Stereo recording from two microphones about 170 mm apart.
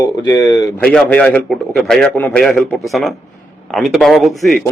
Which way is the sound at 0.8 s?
5° left (ahead or behind).